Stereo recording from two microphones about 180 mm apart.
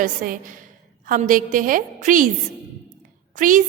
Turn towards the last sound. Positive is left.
turn(degrees=-45)  # may be behind; listen again after turning